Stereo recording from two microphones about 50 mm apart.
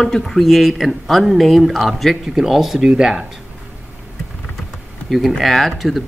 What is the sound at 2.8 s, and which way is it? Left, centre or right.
Speech, centre.